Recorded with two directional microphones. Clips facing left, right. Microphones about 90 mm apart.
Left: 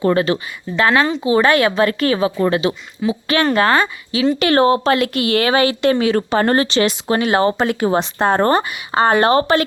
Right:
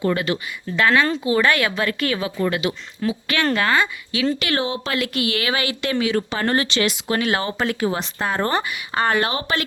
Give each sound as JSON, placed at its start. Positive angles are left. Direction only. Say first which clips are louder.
{"t": 0.0, "sound": "speech", "louder": "left 6 dB", "side_deg": 35}
{"t": 7.9, "sound": "speech", "louder": "left 7 dB", "side_deg": 35}
{"t": 8.7, "sound": "speech", "louder": "left 6 dB", "side_deg": 30}